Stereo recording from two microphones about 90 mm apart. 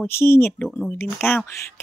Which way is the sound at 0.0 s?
25° left (ahead or behind).